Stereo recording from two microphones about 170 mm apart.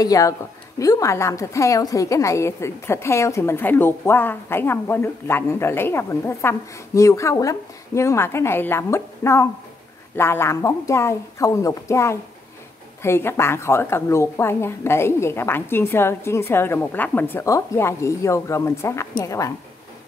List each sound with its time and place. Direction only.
0.0 s a woman's voice: 20° left (ahead or behind)